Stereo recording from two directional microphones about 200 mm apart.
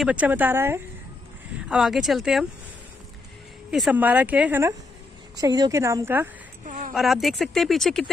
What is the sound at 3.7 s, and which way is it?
Speech, 5° right (ahead or behind).